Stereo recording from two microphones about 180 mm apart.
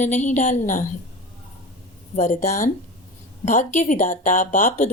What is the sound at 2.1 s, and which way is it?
Speech, 40° left (ahead or behind).